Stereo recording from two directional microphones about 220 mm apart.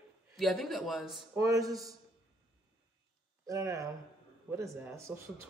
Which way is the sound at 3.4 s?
15° right (ahead or behind).